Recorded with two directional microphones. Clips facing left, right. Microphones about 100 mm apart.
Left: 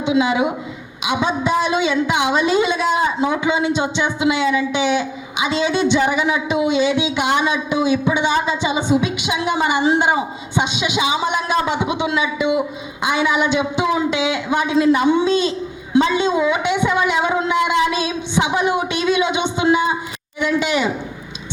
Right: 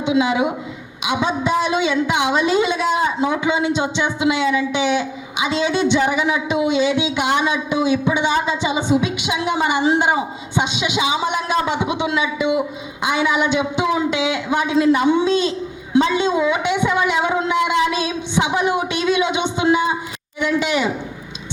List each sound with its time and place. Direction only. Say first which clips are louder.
0.0 s a woman's voice: left 1 dB; 20° left (ahead or behind)